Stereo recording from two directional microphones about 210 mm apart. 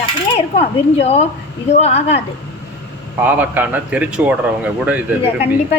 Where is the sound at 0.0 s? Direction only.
30° left (ahead or behind).